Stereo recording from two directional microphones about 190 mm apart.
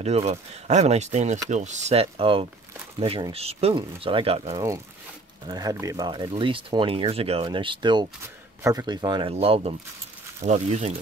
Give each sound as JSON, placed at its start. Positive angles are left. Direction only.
{"t": 0.0, "sound": "speech", "side_deg": -35}
{"t": 5.5, "sound": "speech", "side_deg": -20}
{"t": 9.3, "sound": "speech", "side_deg": -35}